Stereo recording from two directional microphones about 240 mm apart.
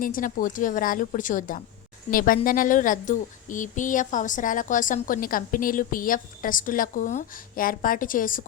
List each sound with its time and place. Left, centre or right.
0.0 s speech: left